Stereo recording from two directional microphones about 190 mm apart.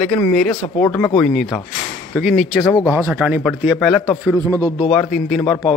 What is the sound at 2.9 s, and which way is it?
Speech, 10° right (ahead or behind).